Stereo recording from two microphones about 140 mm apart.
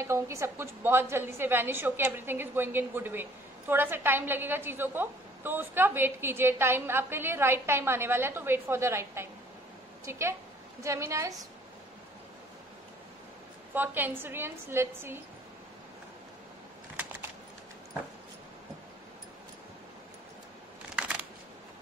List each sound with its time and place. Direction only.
0.0 s a woman's voice: 20° right (ahead or behind)
13.7 s a woman's voice: 15° right (ahead or behind)
16.9 s a sound: 10° right (ahead or behind)